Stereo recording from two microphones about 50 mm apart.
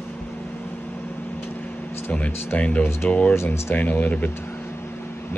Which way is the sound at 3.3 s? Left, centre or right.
Left.